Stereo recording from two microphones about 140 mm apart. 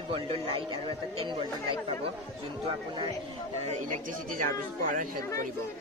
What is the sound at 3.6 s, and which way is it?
Speech, 60° right (ahead or behind).